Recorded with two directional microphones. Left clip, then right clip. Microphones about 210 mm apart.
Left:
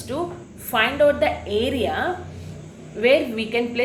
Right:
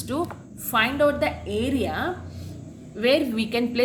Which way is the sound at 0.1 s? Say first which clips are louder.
Left 1 dB; 40° right (ahead or behind).